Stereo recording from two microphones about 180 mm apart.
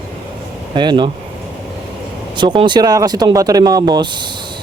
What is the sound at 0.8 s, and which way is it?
Speech, 25° right (ahead or behind).